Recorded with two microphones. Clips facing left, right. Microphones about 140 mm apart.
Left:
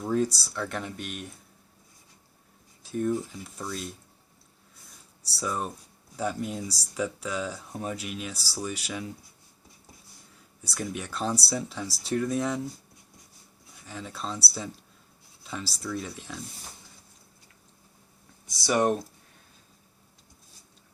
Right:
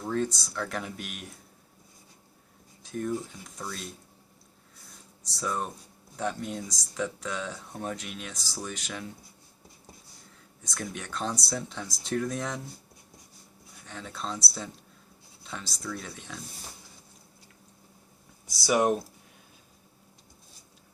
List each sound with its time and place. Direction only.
0.0 s speech: 10° left (ahead or behind)
0.3 s speech: 35° left (ahead or behind)
0.5 s speech: centre (ahead or behind)
2.8 s speech: 5° left (ahead or behind)
5.4 s speech: 5° left (ahead or behind)
10.6 s speech: 5° left (ahead or behind)
13.8 s speech: 5° left (ahead or behind)
18.4 s speech: 5° right (ahead or behind)